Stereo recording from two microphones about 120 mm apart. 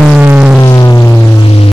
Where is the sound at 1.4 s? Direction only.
55° left (ahead or behind).